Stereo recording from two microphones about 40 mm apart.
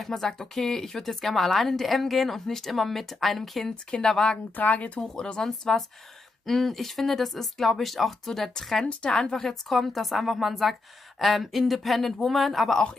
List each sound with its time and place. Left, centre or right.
0.0 s speech: centre
4.0 s speech: centre
4.6 s speech: left
5.0 s speech: centre